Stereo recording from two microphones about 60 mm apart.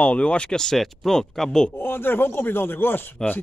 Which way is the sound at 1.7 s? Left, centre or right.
Left.